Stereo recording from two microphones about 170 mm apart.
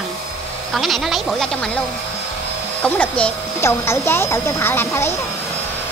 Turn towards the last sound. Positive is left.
turn(degrees=15)  # may be behind; listen again after turning